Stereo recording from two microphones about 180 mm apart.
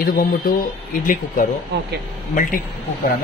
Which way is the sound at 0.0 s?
55° left (ahead or behind).